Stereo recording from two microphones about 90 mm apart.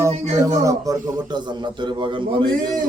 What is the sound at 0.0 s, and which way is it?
A man's voice, 40° right (ahead or behind).